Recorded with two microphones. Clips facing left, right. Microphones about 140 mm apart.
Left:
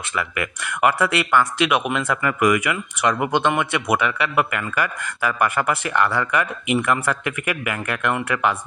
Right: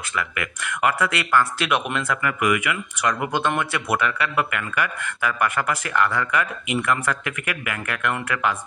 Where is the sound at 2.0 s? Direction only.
30° left (ahead or behind).